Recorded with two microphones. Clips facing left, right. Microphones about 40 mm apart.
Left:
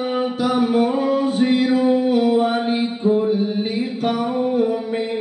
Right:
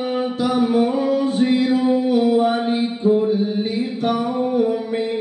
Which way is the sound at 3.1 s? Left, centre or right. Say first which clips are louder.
Right 1 dB; centre.